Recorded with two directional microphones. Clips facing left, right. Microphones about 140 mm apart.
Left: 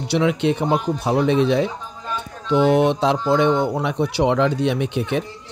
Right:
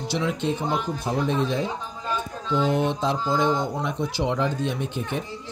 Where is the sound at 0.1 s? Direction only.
70° left (ahead or behind).